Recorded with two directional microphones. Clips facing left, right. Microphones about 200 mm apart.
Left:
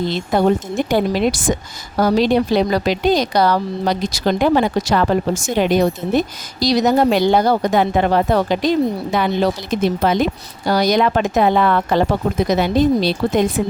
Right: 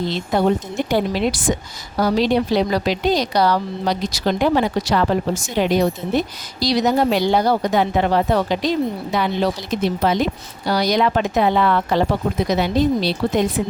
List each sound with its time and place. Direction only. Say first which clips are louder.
0.3 s speech: left 2 dB; 50° left (ahead or behind)